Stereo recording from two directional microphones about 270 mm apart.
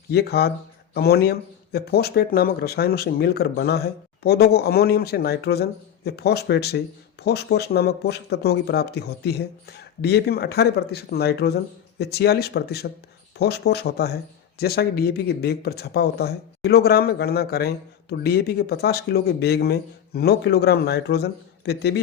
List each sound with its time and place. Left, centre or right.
0.1 s speech: left